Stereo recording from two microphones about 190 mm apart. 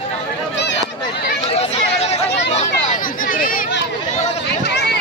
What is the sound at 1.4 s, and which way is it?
Chatter, 30° left (ahead or behind).